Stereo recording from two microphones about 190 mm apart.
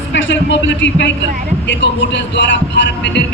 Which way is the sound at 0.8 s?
70° left (ahead or behind).